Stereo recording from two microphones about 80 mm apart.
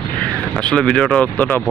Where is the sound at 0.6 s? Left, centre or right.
Centre.